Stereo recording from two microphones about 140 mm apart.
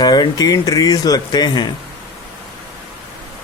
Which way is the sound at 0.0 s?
30° left (ahead or behind).